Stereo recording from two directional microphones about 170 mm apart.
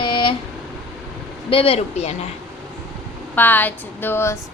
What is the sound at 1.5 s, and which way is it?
Speech, 35° left (ahead or behind).